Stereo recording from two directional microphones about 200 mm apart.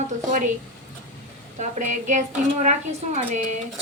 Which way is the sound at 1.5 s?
35° right (ahead or behind).